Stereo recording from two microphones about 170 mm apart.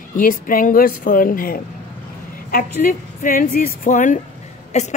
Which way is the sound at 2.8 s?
55° left (ahead or behind).